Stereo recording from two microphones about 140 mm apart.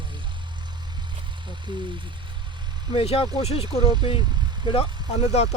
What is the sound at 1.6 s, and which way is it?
Speech, 35° right (ahead or behind).